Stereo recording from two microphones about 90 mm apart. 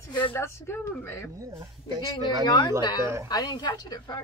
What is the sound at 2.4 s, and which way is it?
Speech, 50° left (ahead or behind).